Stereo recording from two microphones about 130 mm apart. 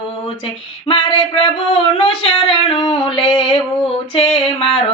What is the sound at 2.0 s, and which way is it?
Female singing, 40° left (ahead or behind).